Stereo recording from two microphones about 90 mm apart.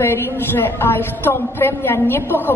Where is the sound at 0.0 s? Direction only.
25° left (ahead or behind).